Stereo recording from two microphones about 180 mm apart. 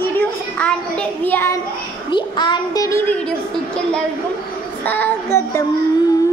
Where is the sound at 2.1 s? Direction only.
25° left (ahead or behind).